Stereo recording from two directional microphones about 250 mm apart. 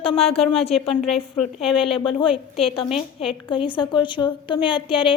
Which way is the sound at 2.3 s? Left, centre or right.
Centre.